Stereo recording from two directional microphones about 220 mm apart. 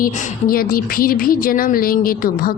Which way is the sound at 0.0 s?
40° left (ahead or behind).